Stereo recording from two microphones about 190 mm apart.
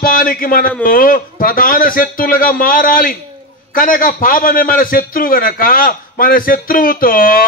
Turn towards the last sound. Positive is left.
turn(degrees=50)  # may be behind; listen again after turning